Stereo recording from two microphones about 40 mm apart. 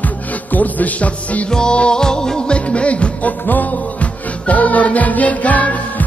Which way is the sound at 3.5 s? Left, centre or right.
Left.